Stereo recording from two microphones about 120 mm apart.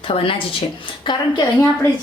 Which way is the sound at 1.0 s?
40° left (ahead or behind).